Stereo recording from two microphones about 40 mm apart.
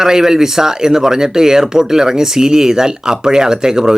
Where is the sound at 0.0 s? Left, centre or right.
Centre.